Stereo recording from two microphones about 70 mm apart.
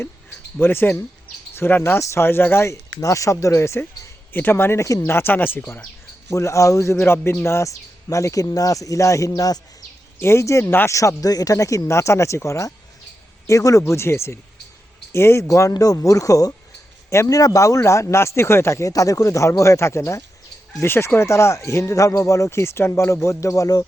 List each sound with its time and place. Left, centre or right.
0.6 s speech: left
2.0 s speech: left
2.2 s speech: left
3.0 s speech: left
5.0 s speech: left
6.3 s speech: left
9.3 s speech: left
10.2 s speech: left
20.8 s speech: left